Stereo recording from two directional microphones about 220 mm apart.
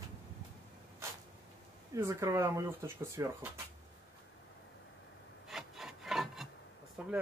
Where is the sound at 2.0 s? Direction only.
15° right (ahead or behind).